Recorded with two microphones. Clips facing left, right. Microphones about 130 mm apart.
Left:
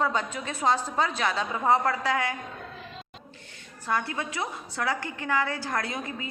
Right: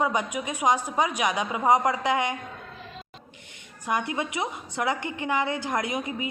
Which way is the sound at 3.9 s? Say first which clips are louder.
Right 2 dB; 20° right (ahead or behind).